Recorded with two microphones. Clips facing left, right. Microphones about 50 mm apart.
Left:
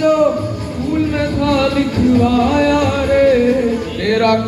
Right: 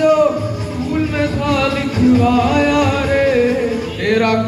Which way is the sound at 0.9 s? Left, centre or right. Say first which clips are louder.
Left 1 dB; right.